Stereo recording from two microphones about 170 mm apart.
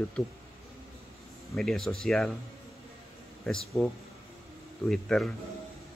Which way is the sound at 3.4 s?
5° left (ahead or behind).